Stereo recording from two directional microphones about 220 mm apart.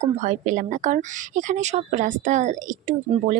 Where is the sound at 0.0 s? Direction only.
30° right (ahead or behind).